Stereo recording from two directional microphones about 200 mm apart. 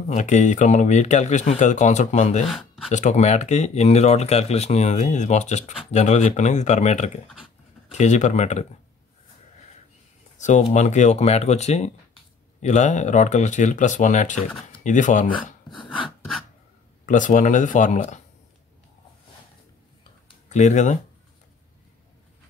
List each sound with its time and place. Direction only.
0.1 s speech: 40° left (ahead or behind)
2.5 s a sound: centre (ahead or behind)
2.9 s speech: 35° left (ahead or behind)
10.4 s speech: 35° left (ahead or behind)
15.7 s a sound: 25° left (ahead or behind)
17.0 s speech: 40° left (ahead or behind)
20.4 s speech: 35° left (ahead or behind)